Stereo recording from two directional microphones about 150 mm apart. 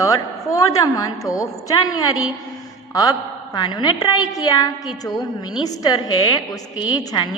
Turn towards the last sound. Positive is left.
turn(degrees=25)  # may be behind; listen again after turning